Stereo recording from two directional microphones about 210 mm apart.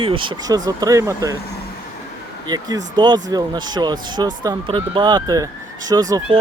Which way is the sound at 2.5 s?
20° right (ahead or behind).